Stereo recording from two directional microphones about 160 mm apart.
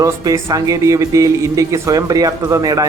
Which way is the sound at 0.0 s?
20° right (ahead or behind).